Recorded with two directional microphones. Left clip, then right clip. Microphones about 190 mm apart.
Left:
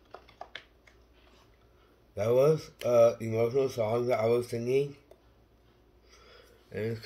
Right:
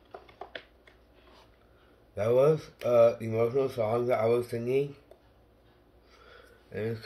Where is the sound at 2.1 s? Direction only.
15° left (ahead or behind).